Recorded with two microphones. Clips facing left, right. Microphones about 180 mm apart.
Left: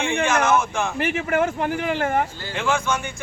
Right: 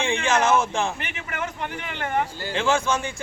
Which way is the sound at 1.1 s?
45° left (ahead or behind).